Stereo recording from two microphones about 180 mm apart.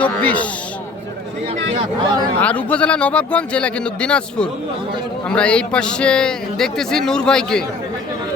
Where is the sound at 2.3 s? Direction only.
5° left (ahead or behind).